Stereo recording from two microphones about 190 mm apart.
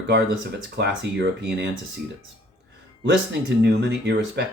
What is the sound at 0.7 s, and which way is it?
Speech, 60° right (ahead or behind).